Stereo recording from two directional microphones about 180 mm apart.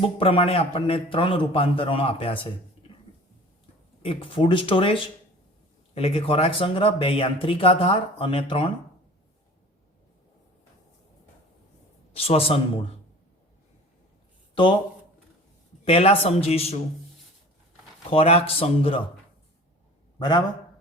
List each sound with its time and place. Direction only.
0.2 s speech: 30° left (ahead or behind)
4.0 s speech: 30° left (ahead or behind)
12.1 s speech: 35° left (ahead or behind)
14.5 s speech: 25° left (ahead or behind)
15.8 s speech: 35° left (ahead or behind)
18.1 s speech: 30° left (ahead or behind)
20.1 s a man's voice: 25° left (ahead or behind)